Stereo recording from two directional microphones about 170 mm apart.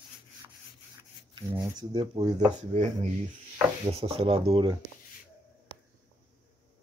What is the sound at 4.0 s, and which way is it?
Speech, 35° right (ahead or behind).